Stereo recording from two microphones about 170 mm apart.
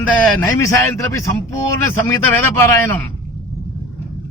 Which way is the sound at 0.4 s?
15° left (ahead or behind).